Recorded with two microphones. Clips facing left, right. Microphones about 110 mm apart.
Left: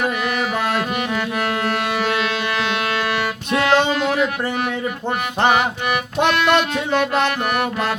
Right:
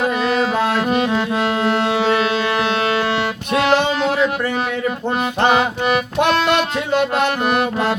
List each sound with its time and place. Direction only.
0.0 s music: 30° right (ahead or behind)
5.5 s music: 25° right (ahead or behind)